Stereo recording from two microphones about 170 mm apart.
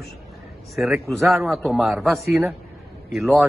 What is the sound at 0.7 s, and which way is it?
A man's voice, centre (ahead or behind).